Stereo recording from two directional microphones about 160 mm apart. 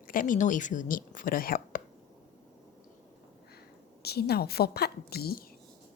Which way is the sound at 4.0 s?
85° left.